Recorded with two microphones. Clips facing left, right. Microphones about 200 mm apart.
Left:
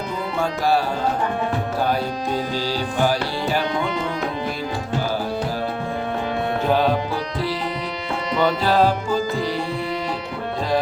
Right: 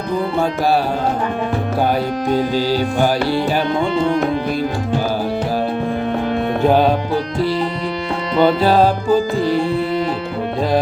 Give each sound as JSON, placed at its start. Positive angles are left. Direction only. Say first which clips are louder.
{"t": 8.4, "sound": "music", "louder": "right 7 dB", "side_deg": -60}